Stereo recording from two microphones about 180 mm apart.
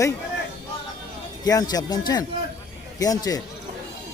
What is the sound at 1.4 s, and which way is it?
Speech, 20° left (ahead or behind).